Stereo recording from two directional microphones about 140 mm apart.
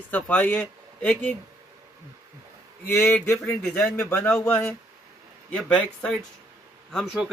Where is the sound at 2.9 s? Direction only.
20° left (ahead or behind).